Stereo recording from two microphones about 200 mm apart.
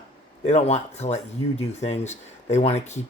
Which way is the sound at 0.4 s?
35° left (ahead or behind).